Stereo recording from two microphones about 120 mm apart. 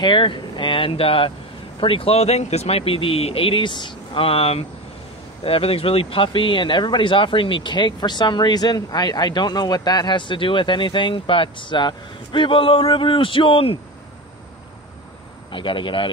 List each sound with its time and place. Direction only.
0.0 s speech: 40° left (ahead or behind)
15.5 s speech: 45° left (ahead or behind)